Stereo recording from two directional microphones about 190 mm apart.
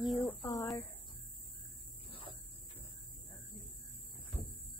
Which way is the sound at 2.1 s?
25° left (ahead or behind).